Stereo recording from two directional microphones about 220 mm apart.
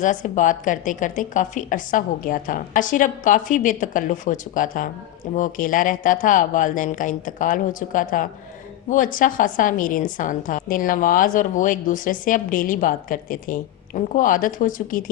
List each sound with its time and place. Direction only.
0.0 s a woman's voice: 35° left (ahead or behind)